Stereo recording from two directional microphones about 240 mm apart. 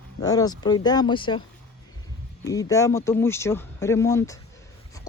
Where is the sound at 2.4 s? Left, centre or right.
Centre.